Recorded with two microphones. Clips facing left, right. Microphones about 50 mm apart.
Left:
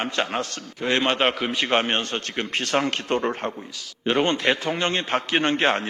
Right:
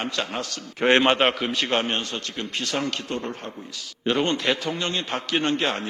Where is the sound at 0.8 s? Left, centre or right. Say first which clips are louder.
Right 5 dB; right.